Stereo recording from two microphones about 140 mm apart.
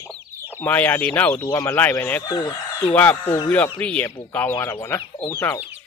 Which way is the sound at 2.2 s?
30° left (ahead or behind).